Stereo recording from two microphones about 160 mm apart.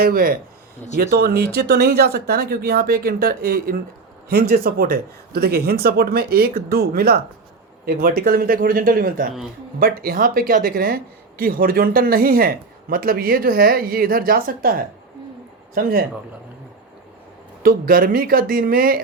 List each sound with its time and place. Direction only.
0.0 s speech: 65° right (ahead or behind)
11.3 s speech: 65° right (ahead or behind)
17.6 s speech: 65° right (ahead or behind)